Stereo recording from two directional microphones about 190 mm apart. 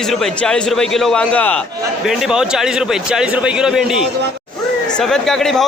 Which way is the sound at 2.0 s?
Centre (ahead or behind).